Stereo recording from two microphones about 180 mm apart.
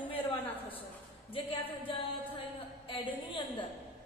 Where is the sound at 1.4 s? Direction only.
30° left (ahead or behind).